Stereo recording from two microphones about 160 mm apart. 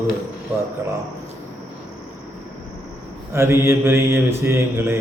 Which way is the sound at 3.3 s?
15° right (ahead or behind).